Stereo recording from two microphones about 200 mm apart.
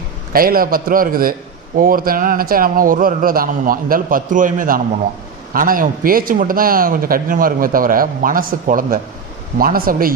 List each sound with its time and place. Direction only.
0.3 s a man's voice: 45° right (ahead or behind)